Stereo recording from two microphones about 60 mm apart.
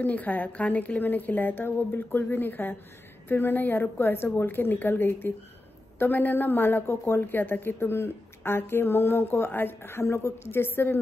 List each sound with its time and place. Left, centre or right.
0.0 s a woman's voice: left